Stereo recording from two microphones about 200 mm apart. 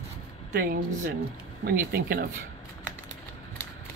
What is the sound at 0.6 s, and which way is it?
Speech, 45° right (ahead or behind).